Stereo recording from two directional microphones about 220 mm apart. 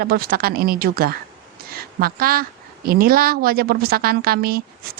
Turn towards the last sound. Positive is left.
turn(degrees=-45)  # may be behind; listen again after turning